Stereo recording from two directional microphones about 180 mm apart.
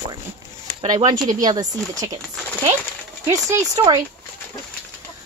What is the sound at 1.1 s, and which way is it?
Speech, 20° right (ahead or behind).